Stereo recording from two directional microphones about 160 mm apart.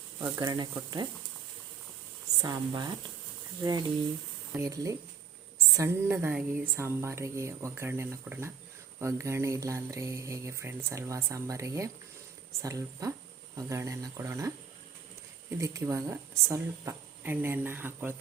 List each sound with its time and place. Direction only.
0.3 s speech: 25° right (ahead or behind)
2.4 s a woman's voice: 25° right (ahead or behind)